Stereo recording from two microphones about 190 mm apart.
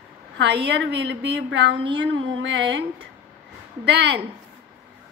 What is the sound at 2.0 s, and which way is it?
Music, 75° right (ahead or behind).